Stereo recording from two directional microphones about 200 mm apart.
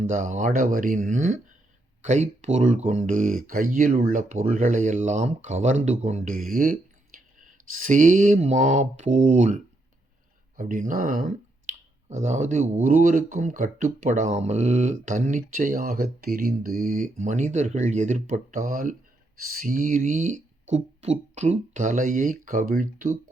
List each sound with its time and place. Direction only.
0.0 s speech: 40° right (ahead or behind)
10.6 s speech: 40° right (ahead or behind)